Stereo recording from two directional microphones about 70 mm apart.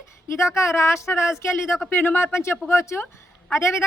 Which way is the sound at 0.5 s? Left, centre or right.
Left.